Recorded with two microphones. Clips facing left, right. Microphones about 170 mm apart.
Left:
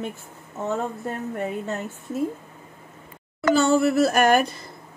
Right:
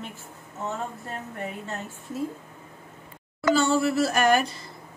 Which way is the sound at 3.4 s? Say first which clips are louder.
Left 3 dB; 50° left (ahead or behind).